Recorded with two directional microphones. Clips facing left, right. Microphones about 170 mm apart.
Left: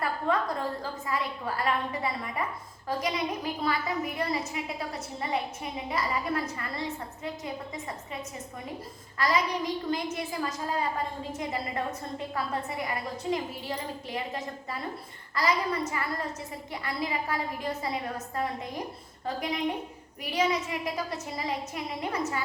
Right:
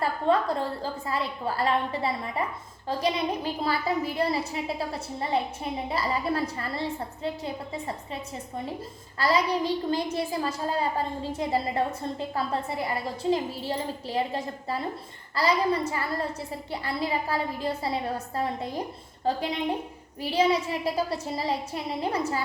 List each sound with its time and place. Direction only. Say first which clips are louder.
0.0 s a woman's voice: right 4 dB; 30° right (ahead or behind)